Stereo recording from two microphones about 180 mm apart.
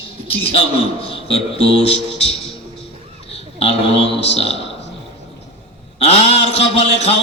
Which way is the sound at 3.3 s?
35° left (ahead or behind).